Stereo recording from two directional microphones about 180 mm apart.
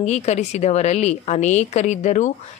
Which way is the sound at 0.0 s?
40° left (ahead or behind).